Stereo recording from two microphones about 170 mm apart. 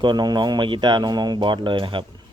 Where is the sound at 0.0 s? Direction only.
25° right (ahead or behind).